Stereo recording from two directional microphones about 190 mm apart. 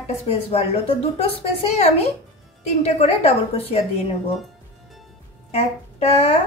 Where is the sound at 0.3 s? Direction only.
30° left (ahead or behind).